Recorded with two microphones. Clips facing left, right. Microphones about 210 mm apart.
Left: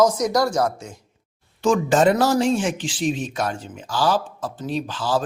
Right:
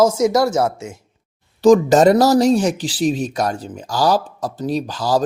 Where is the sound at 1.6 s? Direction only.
40° right (ahead or behind).